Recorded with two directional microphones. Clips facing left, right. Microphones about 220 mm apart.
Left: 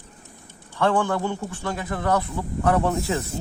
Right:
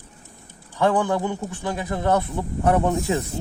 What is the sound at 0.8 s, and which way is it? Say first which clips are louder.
Speech: right 1 dB; 15° right (ahead or behind).